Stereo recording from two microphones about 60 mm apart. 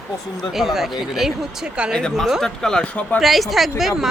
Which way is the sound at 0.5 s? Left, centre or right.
Centre.